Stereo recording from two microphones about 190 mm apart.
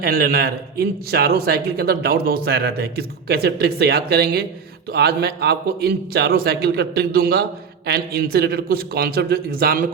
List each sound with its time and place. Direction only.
0.0 s a man's voice: 55° right (ahead or behind)